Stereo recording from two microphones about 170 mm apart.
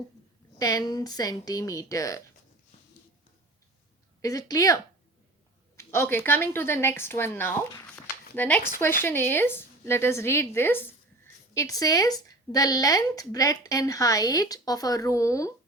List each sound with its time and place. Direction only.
0.6 s speech: 20° left (ahead or behind)
4.2 s speech: 20° left (ahead or behind)